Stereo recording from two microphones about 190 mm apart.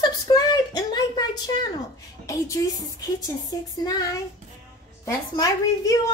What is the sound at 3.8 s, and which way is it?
Speech, 20° left (ahead or behind).